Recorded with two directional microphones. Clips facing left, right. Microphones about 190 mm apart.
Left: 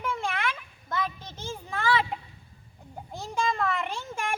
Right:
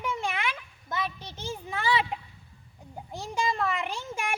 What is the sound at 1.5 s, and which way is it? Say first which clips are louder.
Speech: left 1 dB; 10° right (ahead or behind).